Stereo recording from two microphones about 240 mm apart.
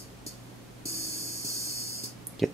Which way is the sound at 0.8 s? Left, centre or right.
Right.